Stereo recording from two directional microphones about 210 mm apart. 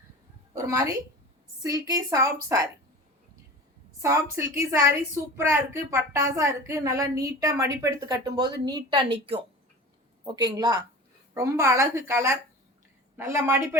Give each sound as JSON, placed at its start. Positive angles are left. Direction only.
{"t": 0.5, "sound": "a woman's voice", "side_deg": -15}
{"t": 4.0, "sound": "a woman's voice", "side_deg": -15}